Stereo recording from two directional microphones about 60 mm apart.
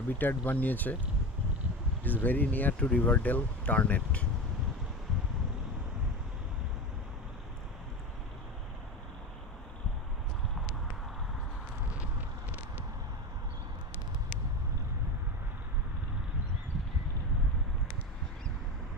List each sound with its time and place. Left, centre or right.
0.1 s speech: left
2.0 s speech: left